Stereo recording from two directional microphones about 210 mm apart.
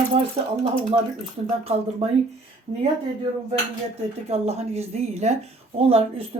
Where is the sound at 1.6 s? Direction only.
30° right (ahead or behind).